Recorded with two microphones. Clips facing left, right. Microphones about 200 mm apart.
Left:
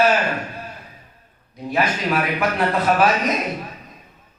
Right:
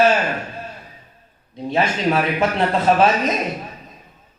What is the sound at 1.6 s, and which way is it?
A man's voice, 25° right (ahead or behind).